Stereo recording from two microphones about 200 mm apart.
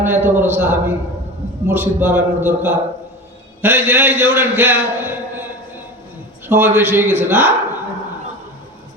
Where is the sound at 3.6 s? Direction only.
10° right (ahead or behind).